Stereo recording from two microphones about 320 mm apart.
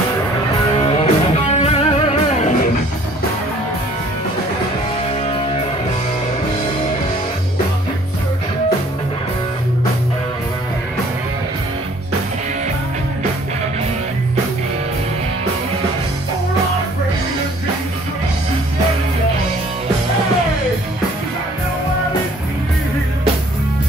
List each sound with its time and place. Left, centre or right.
0.7 s music: centre
5.2 s music: centre